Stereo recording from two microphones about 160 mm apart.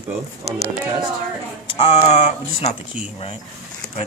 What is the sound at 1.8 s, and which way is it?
Speech, 40° left (ahead or behind).